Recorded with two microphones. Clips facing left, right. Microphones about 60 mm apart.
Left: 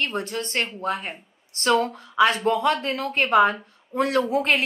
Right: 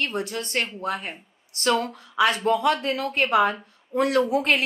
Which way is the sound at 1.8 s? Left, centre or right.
Left.